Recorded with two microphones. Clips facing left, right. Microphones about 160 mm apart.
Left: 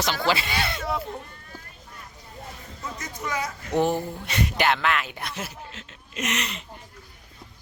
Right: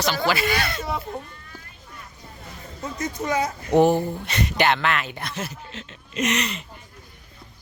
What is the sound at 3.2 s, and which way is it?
Speech, 25° right (ahead or behind).